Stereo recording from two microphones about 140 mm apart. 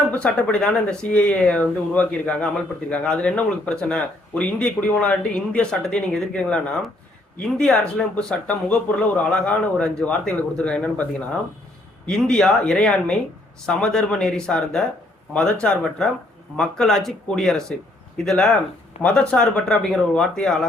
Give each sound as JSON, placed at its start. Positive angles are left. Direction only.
{"t": 0.1, "sound": "a man's voice", "side_deg": 5}
{"t": 12.0, "sound": "a man's voice", "side_deg": 5}
{"t": 19.0, "sound": "speech", "side_deg": 50}
{"t": 19.3, "sound": "speech", "side_deg": 10}